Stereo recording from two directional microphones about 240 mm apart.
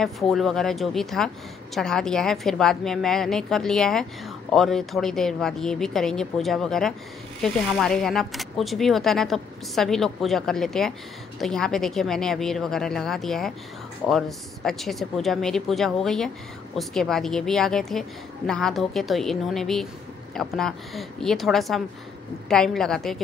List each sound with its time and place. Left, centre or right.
0.0 s speech: centre